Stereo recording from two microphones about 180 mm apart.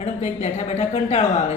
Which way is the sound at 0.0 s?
40° left (ahead or behind).